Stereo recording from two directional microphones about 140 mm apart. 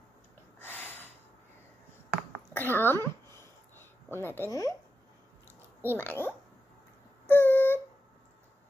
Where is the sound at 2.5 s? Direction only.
15° left (ahead or behind).